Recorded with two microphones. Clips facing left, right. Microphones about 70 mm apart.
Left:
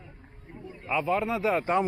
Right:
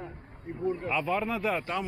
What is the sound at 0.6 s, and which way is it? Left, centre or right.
Speech, right.